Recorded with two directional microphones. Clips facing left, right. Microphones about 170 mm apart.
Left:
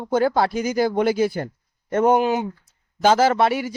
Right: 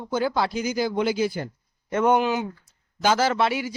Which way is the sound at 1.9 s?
40° left (ahead or behind).